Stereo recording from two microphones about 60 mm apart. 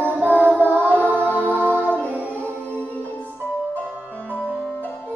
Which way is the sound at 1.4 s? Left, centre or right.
Right.